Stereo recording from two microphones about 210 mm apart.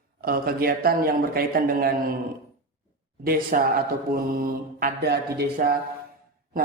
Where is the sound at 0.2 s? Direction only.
45° right (ahead or behind).